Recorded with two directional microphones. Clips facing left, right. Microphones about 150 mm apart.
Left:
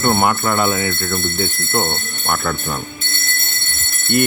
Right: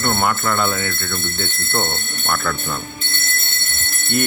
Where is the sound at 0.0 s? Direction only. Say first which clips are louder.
Left 3 dB; 20° left (ahead or behind).